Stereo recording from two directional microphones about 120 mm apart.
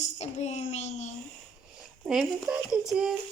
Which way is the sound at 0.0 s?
65° left (ahead or behind).